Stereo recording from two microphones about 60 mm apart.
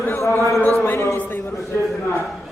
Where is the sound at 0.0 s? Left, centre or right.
Left.